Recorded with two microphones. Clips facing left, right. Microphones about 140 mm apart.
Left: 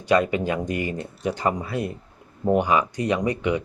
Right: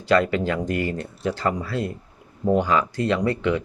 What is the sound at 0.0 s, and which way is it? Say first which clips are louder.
Speech: right 1 dB; 20° left (ahead or behind).